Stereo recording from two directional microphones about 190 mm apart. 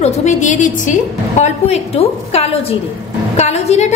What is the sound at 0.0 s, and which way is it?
Frying, 40° left (ahead or behind).